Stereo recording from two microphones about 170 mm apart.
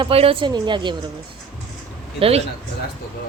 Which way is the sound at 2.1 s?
35° right (ahead or behind).